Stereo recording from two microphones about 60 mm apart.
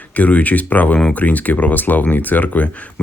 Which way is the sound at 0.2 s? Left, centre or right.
Left.